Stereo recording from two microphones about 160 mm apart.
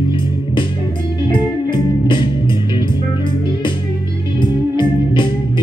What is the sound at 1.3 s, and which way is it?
Music, 30° left (ahead or behind).